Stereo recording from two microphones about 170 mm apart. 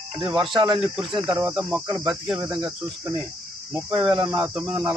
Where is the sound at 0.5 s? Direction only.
25° right (ahead or behind).